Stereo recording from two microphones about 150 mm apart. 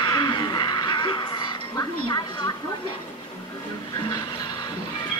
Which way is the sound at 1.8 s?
30° left (ahead or behind).